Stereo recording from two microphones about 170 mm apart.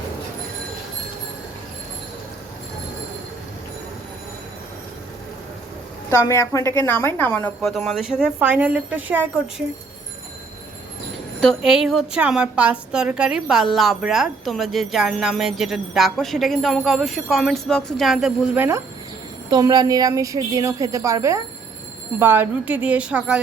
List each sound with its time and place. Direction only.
6.1 s a woman's voice: 15° left (ahead or behind); by 9.3 s 10° right (ahead or behind)
11.3 s a woman's voice: centre (ahead or behind)
19.5 s a woman's voice: 20° right (ahead or behind); by 23.4 s 5° right (ahead or behind)